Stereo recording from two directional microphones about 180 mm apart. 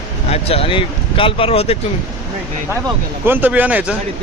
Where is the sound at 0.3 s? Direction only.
35° left (ahead or behind).